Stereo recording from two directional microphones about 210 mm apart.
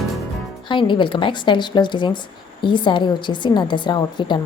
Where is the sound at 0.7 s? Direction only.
25° left (ahead or behind).